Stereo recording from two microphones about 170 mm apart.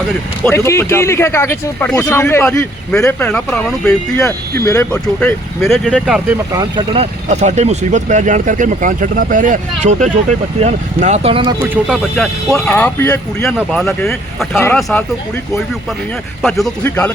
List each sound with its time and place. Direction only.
0.4 s speech: 15° left (ahead or behind)
4.6 s speech: 15° left (ahead or behind); by 6.4 s 5° right (ahead or behind)
6.5 s speech: 25° right (ahead or behind)
6.9 s speech: 40° right (ahead or behind)
11.6 s speech: 10° right (ahead or behind)
12.5 s speech: 10° left (ahead or behind)
13.7 s speech: centre (ahead or behind)
14.5 s speech: 15° left (ahead or behind)
14.8 s speech: centre (ahead or behind)
16.4 s speech: centre (ahead or behind)